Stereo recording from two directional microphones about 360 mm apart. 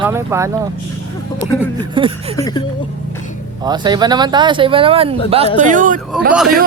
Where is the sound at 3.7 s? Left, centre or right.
Centre.